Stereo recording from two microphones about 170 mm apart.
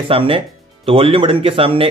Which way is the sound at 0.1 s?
35° right (ahead or behind).